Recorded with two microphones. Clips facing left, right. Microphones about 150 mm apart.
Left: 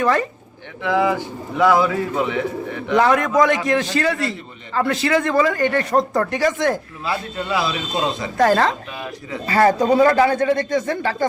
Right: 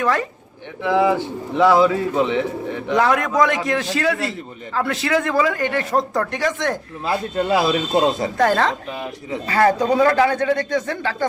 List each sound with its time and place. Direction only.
0.0 s a man's voice: centre (ahead or behind)
0.8 s a man's voice: 20° right (ahead or behind)
2.9 s a man's voice: centre (ahead or behind)
7.0 s a man's voice: 45° right (ahead or behind)
8.4 s a man's voice: centre (ahead or behind)